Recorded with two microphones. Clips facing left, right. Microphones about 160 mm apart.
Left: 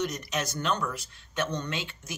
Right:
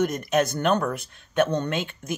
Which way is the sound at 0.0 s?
55° right (ahead or behind).